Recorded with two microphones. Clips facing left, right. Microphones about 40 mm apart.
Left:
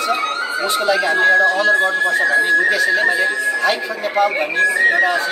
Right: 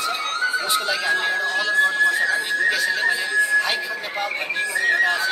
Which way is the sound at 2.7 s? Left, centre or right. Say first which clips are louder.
Left 5 dB; centre.